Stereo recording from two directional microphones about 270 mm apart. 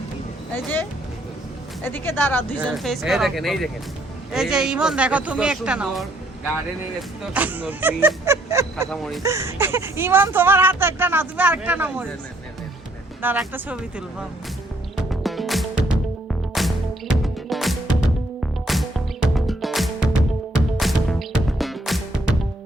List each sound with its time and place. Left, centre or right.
0.5 s speech: centre
7.3 s speech: centre
8.9 s speech: centre
9.2 s speech: centre
13.2 s speech: centre
14.9 s music: centre